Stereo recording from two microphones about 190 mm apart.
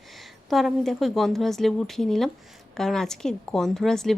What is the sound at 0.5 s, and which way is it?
A woman's voice, centre (ahead or behind).